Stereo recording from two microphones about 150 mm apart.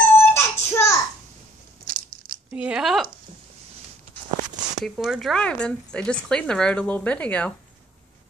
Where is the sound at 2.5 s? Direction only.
5° right (ahead or behind).